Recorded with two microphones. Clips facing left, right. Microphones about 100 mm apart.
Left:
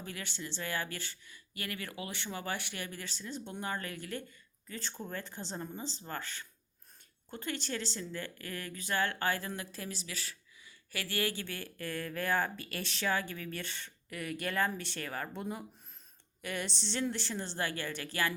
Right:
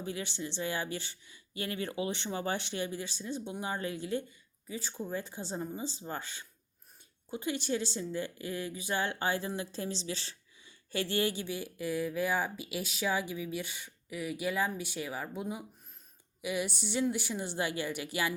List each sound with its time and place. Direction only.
0.0 s speech: 20° right (ahead or behind)